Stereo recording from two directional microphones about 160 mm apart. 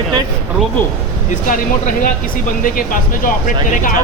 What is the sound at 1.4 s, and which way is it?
Speech, 55° left (ahead or behind).